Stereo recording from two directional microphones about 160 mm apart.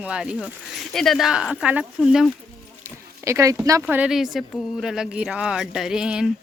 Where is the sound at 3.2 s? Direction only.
20° right (ahead or behind).